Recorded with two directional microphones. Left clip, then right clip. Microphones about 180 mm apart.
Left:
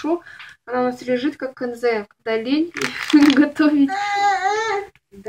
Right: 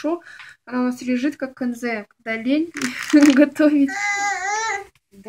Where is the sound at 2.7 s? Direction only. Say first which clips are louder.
Left 1 dB; 10° right (ahead or behind).